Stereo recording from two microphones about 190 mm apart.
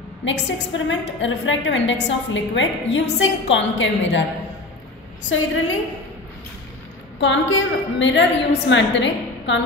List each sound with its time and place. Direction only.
0.2 s a woman's voice: 75° left (ahead or behind)
5.3 s a woman's voice: 90° left
7.2 s a woman's voice: 80° left